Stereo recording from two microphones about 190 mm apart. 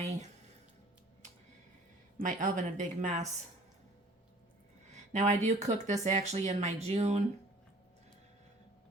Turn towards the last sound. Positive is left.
turn(degrees=-35)  # may be behind; listen again after turning